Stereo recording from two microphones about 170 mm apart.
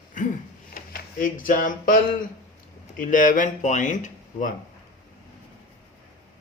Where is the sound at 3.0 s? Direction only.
50° left (ahead or behind).